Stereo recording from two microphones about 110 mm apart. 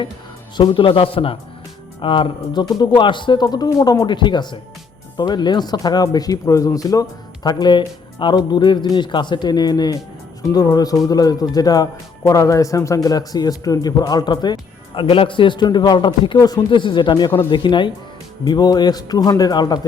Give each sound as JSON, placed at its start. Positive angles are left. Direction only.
{"t": 0.5, "sound": "speech", "side_deg": 45}
{"t": 7.4, "sound": "speech", "side_deg": 45}